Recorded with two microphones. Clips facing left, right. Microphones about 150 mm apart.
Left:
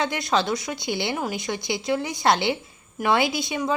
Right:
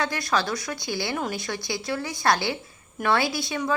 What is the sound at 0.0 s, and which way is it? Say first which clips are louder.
A woman's voice: left 2 dB; 20° left (ahead or behind).